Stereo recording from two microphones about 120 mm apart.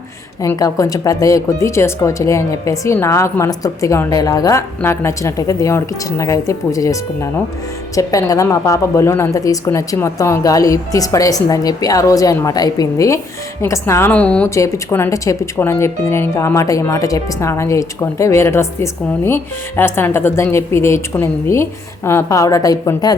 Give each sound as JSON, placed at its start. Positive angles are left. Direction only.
{"t": 0.4, "sound": "speech", "side_deg": 30}
{"t": 14.1, "sound": "speech", "side_deg": 10}
{"t": 14.5, "sound": "speech", "side_deg": 25}